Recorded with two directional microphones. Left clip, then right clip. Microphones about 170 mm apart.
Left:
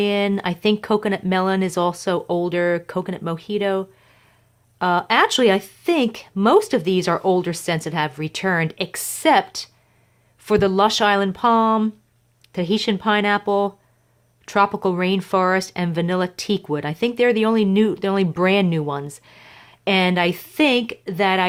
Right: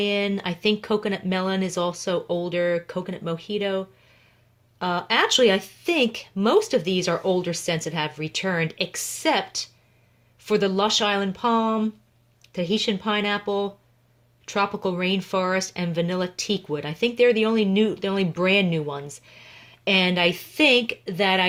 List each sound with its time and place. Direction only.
0.0 s speech: 30° left (ahead or behind)